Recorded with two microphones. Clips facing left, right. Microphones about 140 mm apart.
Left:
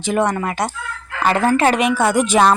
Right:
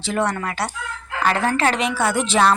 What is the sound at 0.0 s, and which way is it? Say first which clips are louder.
A woman's voice: left 4 dB; 20° left (ahead or behind).